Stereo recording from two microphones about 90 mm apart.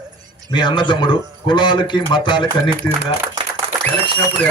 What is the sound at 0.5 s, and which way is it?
A man's voice, 60° left (ahead or behind).